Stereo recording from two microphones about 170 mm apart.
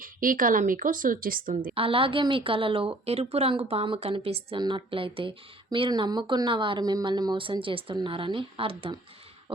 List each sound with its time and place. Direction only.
0.0 s speech: 55° right (ahead or behind)
1.7 s a woman's voice: 35° right (ahead or behind)